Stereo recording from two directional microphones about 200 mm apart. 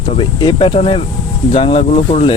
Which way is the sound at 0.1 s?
25° left (ahead or behind).